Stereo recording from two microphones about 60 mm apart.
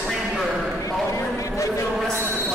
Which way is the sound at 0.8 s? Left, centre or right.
Left.